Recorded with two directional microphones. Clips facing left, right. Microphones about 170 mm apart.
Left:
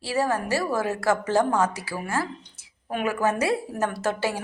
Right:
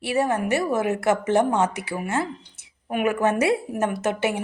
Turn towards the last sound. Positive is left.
turn(degrees=-20)  # may be behind; listen again after turning